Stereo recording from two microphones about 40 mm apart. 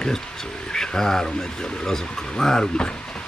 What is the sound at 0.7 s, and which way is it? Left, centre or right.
Speech, centre.